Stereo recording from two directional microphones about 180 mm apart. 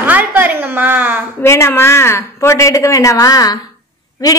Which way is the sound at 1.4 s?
15° left (ahead or behind).